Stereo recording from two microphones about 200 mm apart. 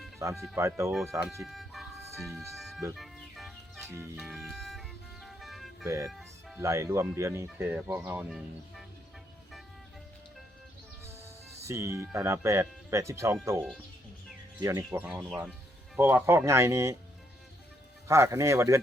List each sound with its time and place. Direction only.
0.4 s speech: 15° right (ahead or behind)
1.5 s vehicle: centre (ahead or behind)
2.2 s speech: centre (ahead or behind)
2.9 s music: centre (ahead or behind)
3.8 s music: 10° right (ahead or behind)
4.2 s music: centre (ahead or behind)
5.8 s speech: 15° right (ahead or behind)
6.1 s music: centre (ahead or behind)
6.6 s speech: 15° right (ahead or behind)
11.6 s speech: 15° right (ahead or behind)
18.1 s speech: 15° right (ahead or behind)